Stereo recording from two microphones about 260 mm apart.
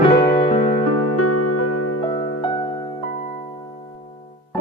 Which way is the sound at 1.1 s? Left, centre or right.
Left.